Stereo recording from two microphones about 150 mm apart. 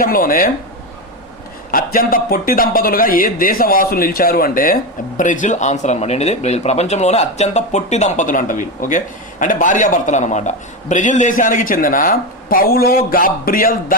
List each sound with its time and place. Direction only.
0.0 s speech: 70° left (ahead or behind)
1.7 s speech: 80° left